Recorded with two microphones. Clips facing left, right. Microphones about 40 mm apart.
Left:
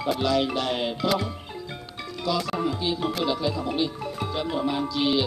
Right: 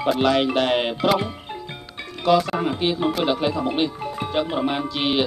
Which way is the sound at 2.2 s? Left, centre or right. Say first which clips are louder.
Right 7 dB; right.